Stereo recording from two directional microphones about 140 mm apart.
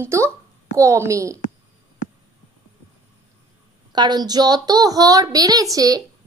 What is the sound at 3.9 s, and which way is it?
A child's voice, 30° right (ahead or behind).